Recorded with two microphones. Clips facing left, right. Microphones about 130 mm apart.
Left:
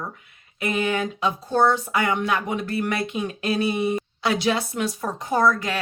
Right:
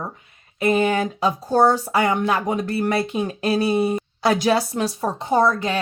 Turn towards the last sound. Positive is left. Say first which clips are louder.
# right 2 dB
turn(degrees=-30)  # may be behind; listen again after turning